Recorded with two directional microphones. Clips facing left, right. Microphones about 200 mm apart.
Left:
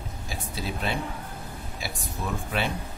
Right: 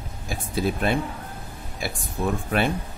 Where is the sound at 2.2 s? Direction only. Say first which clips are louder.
Right 7 dB; 55° right (ahead or behind).